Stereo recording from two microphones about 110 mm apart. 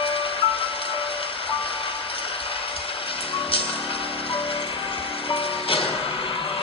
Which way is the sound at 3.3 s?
55° left (ahead or behind).